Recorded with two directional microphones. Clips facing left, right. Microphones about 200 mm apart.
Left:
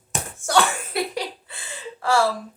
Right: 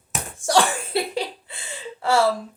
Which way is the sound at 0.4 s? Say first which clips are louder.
Right 1 dB; 30° right (ahead or behind).